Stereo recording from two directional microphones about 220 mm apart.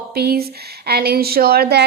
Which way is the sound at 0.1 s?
45° right (ahead or behind).